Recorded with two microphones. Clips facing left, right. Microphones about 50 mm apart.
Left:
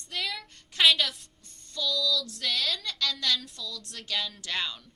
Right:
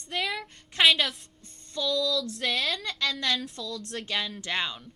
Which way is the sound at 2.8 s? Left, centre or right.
Right.